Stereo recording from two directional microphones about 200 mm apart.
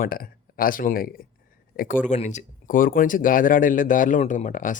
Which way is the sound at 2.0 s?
35° left (ahead or behind).